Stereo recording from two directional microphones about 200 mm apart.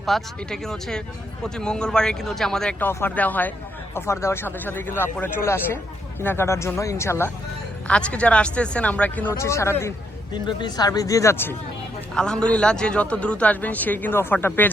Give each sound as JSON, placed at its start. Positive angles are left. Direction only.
{"t": 0.0, "sound": "a man's voice", "side_deg": 0}